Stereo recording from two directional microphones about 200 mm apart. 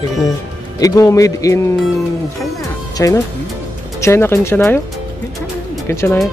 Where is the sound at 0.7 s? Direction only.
15° left (ahead or behind).